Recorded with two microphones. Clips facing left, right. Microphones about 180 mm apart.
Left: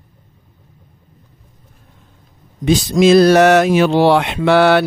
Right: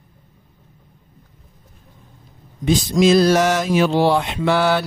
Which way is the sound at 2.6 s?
80° left.